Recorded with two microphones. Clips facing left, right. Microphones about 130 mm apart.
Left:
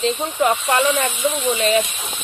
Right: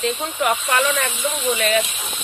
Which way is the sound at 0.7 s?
30° left (ahead or behind).